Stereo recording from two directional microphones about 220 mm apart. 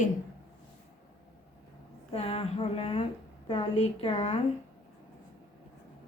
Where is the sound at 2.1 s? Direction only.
25° left (ahead or behind).